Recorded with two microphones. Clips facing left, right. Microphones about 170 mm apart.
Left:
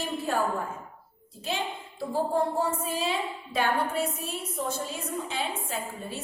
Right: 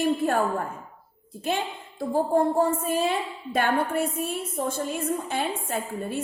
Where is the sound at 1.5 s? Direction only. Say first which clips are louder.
Right 4 dB; 55° right (ahead or behind).